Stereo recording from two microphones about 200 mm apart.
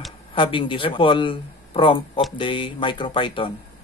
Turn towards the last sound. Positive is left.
turn(degrees=25)  # may be behind; listen again after turning